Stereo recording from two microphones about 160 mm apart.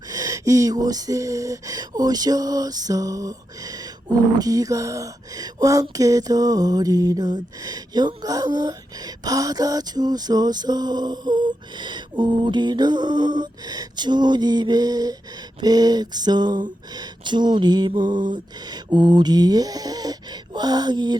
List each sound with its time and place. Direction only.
0.1 s speech: 20° right (ahead or behind)